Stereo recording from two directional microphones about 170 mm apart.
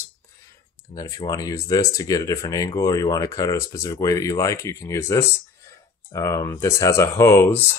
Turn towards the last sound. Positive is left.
turn(degrees=15)  # may be behind; listen again after turning